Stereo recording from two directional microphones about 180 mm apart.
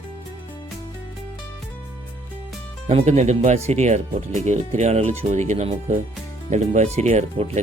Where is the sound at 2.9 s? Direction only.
35° right (ahead or behind).